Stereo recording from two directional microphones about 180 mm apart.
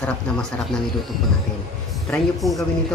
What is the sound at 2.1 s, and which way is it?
Speech, centre (ahead or behind).